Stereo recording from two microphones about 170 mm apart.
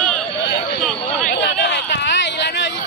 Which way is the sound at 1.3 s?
90° left.